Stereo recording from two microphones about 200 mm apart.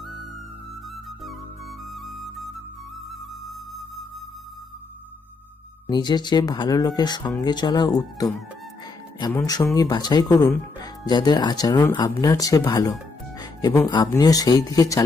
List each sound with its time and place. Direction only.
2.0 s flute: centre (ahead or behind)
5.9 s speech: 20° left (ahead or behind)